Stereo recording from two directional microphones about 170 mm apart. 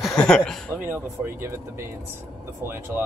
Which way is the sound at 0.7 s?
10° right (ahead or behind).